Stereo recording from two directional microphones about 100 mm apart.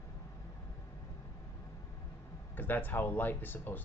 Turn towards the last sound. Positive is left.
turn(degrees=20)  # may be behind; listen again after turning